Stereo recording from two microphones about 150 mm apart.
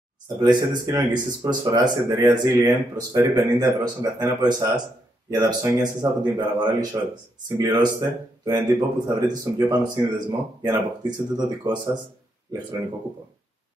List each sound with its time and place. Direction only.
0.4 s speech: 25° right (ahead or behind)